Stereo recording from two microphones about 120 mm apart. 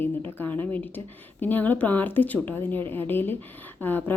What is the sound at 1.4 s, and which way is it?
Speech, 15° left (ahead or behind).